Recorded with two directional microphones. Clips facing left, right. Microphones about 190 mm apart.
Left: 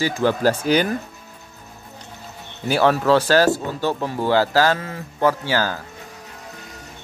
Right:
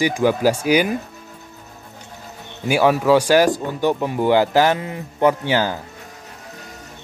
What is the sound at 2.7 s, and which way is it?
Speech, 10° right (ahead or behind).